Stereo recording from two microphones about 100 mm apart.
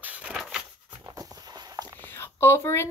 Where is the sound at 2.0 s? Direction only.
25° left (ahead or behind).